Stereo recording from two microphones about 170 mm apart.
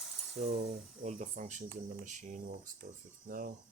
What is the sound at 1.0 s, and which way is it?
Speech, 45° right (ahead or behind).